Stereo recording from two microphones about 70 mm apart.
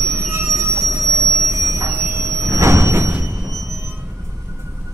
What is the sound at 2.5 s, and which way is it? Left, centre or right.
Sliding door, right.